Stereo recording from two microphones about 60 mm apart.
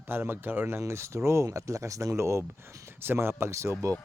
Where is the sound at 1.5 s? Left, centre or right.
Right.